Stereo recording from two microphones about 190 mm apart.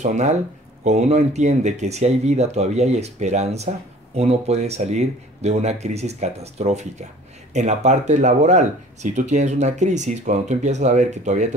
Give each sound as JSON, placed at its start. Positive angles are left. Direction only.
{"t": 0.0, "sound": "speech", "side_deg": -40}